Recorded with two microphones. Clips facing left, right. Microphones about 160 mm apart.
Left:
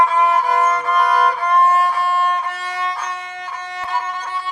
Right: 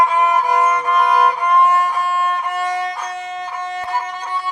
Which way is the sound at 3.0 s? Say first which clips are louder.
Right 3 dB; 20° right (ahead or behind).